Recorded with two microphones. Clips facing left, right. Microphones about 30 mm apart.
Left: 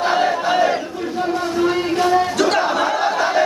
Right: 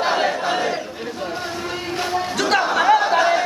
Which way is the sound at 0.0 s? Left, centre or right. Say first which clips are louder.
Left 2 dB; centre.